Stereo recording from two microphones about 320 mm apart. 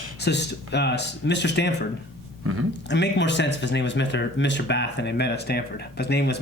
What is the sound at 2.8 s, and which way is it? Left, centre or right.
Speech, left.